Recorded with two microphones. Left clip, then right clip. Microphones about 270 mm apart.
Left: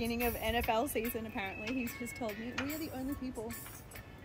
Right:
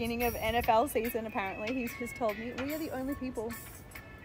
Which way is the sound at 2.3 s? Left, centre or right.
Centre.